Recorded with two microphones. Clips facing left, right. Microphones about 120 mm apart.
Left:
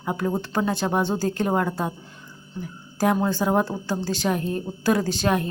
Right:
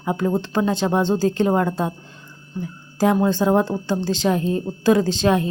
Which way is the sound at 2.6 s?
20° right (ahead or behind).